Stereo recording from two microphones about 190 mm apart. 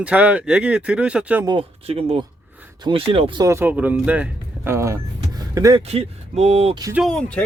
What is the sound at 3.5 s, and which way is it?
Speech, 10° right (ahead or behind).